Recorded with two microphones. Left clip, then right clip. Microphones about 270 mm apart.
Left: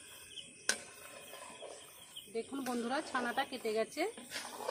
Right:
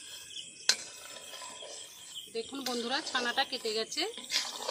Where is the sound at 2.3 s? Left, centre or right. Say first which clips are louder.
Right 3 dB; centre.